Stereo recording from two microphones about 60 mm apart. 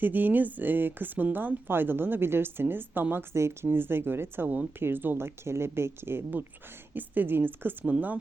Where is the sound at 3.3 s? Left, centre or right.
Right.